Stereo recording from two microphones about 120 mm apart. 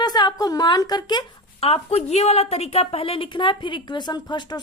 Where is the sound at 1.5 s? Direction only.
55° left (ahead or behind).